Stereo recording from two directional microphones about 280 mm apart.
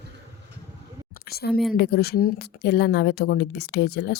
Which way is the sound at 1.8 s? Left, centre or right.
Left.